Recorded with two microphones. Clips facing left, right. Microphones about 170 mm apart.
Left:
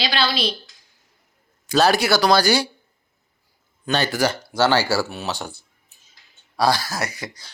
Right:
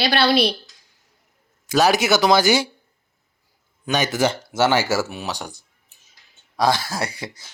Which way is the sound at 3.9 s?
20° right (ahead or behind).